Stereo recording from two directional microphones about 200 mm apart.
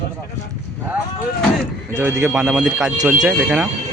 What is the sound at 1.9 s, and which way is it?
Speech, 10° right (ahead or behind).